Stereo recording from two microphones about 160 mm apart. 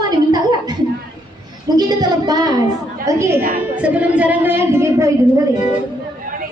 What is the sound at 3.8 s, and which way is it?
A woman's voice, 10° right (ahead or behind).